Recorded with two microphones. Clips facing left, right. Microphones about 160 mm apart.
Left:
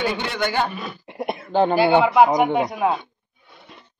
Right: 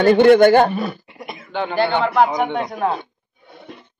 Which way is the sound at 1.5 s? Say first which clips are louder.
Left 6 dB; 35° left (ahead or behind).